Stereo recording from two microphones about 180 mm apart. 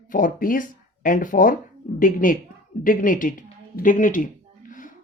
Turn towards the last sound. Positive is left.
turn(degrees=50)  # may be behind; listen again after turning